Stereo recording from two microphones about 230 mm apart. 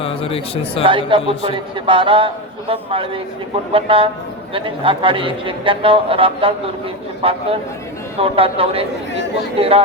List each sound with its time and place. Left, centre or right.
0.0 s speech: left
0.9 s a man's voice: right